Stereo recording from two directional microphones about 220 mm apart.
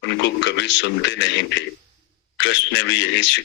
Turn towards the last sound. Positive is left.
turn(degrees=55)  # may be behind; listen again after turning